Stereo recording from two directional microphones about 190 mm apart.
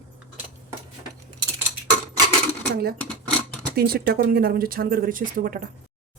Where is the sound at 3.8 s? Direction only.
50° right (ahead or behind).